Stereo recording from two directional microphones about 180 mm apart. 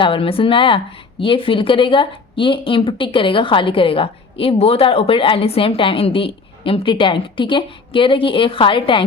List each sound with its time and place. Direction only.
0.0 s speech: 30° left (ahead or behind)